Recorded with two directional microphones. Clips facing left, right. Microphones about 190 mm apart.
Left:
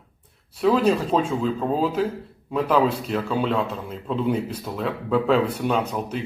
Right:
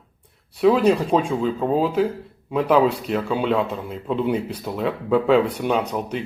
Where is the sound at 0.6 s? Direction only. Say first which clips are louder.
Right 3 dB; centre (ahead or behind).